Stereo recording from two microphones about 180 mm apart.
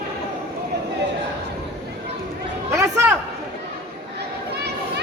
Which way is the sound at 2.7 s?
15° right (ahead or behind).